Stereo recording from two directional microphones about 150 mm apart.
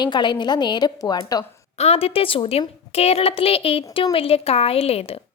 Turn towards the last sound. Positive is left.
turn(degrees=40)  # may be behind; listen again after turning